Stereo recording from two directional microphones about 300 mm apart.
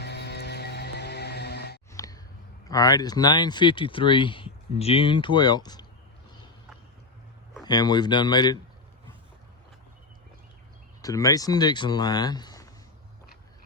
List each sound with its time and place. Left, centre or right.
0.0 s music: left
1.9 s a sound: centre
2.6 s speech: centre
7.6 s speech: centre
11.0 s speech: centre